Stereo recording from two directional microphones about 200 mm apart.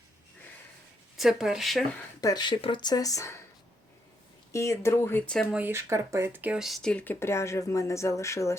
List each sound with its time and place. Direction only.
1.1 s speech: centre (ahead or behind)
2.2 s speech: 20° left (ahead or behind)
4.5 s speech: 15° left (ahead or behind)